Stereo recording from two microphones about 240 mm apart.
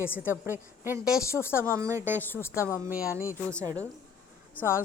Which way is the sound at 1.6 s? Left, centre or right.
Centre.